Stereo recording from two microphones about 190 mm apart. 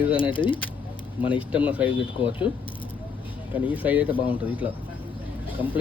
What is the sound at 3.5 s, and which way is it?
Speech, 5° right (ahead or behind).